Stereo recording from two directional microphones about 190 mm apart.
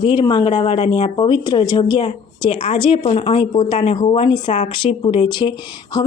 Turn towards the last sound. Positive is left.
turn(degrees=20)  # may be behind; listen again after turning